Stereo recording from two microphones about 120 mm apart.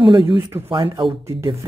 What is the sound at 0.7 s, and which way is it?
Speech, 45° right (ahead or behind).